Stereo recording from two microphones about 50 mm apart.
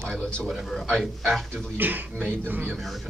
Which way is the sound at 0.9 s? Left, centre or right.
Centre.